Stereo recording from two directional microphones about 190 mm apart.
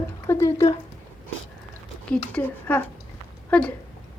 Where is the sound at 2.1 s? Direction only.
10° left (ahead or behind).